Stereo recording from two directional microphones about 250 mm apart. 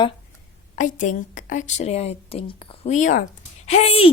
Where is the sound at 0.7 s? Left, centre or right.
Left.